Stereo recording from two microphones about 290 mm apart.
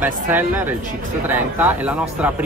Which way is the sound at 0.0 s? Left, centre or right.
Centre.